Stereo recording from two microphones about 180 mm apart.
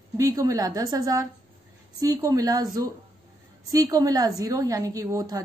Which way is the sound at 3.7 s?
20° right (ahead or behind).